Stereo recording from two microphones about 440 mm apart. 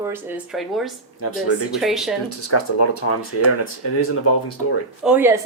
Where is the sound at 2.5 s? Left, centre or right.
Left.